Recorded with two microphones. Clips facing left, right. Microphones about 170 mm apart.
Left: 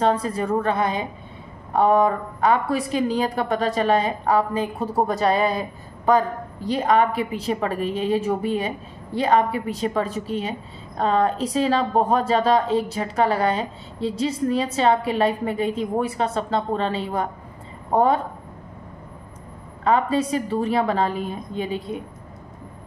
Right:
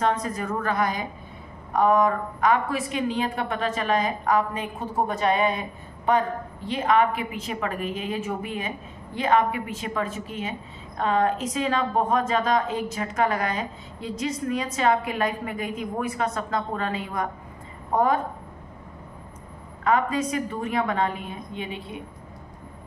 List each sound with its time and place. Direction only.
0.0 s a woman's voice: 30° left (ahead or behind)
19.8 s a woman's voice: 30° left (ahead or behind)